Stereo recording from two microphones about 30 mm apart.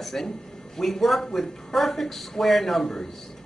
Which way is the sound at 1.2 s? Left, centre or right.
Centre.